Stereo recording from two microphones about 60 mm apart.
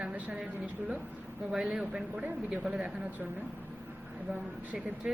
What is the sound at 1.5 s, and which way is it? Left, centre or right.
Speech, centre.